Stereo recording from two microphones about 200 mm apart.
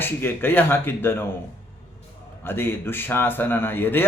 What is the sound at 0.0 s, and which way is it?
A man's voice, 10° left (ahead or behind).